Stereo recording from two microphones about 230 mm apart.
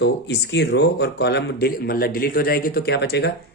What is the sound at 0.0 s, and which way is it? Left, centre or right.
A man's voice, left.